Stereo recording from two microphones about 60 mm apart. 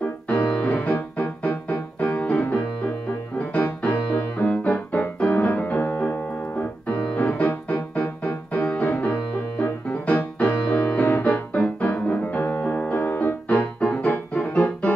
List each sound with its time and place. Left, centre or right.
0.0 s music: left
5.3 s piano: left
9.6 s music: left
14.5 s keyboard: left